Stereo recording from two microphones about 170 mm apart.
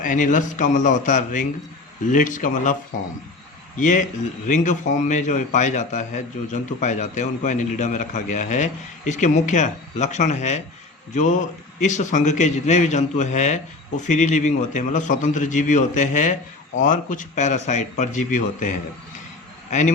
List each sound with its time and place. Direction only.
0.0 s a man's voice: 50° left (ahead or behind)